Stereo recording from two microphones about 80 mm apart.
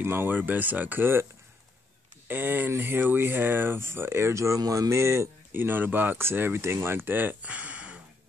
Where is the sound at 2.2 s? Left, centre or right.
Right.